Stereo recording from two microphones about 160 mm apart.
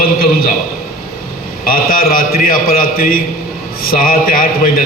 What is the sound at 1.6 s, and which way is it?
A man's voice, 65° left (ahead or behind).